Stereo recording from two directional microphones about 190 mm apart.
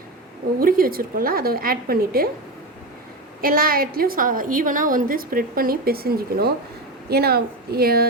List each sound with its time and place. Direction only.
0.6 s a woman's voice: 50° right (ahead or behind)
3.4 s a woman's voice: 50° right (ahead or behind)